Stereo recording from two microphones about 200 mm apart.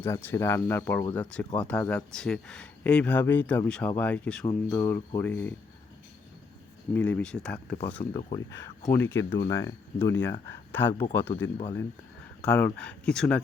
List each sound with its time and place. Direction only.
0.0 s speech: 10° left (ahead or behind)
6.9 s speech: 5° left (ahead or behind)
8.1 s speech: 15° left (ahead or behind)